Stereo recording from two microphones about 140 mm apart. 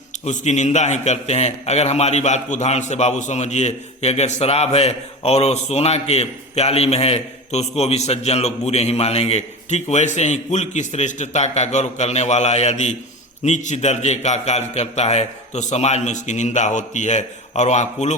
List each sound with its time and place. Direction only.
0.3 s a man's voice: 55° left (ahead or behind)